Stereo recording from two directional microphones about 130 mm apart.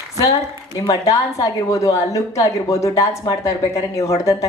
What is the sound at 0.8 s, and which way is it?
A woman's voice, 25° left (ahead or behind).